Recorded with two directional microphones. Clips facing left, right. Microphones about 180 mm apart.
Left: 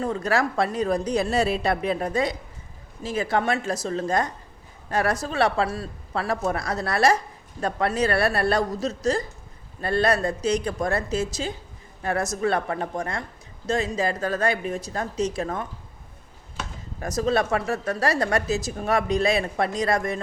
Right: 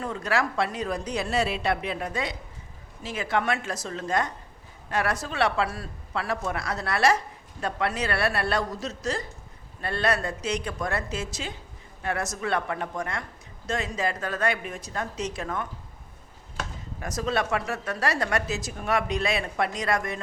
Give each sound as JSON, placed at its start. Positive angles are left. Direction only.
{"t": 0.0, "sound": "a woman's voice", "side_deg": 35}
{"t": 17.0, "sound": "a woman's voice", "side_deg": 35}